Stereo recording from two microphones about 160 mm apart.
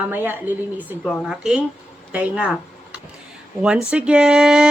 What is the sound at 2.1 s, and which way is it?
Speech, 10° right (ahead or behind).